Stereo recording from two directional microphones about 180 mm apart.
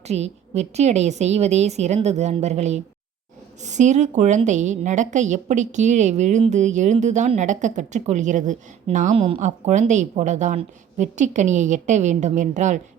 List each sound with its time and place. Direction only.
0.1 s a woman's voice: 35° right (ahead or behind)